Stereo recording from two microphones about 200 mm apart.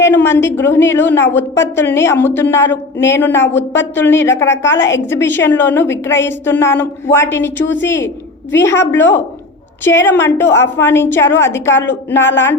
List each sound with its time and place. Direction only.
0.0 s a woman's voice: 10° left (ahead or behind)
7.6 s a woman's voice: 65° left (ahead or behind)
7.9 s a woman's voice: 10° left (ahead or behind)